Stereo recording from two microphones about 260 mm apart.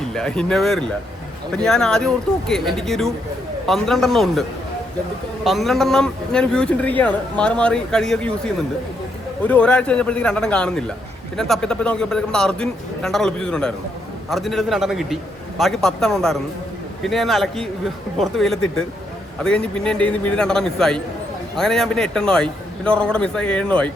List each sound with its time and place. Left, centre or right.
0.1 s a man's voice: centre